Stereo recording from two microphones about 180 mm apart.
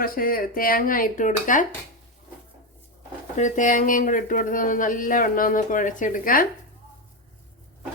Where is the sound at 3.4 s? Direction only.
45° left (ahead or behind).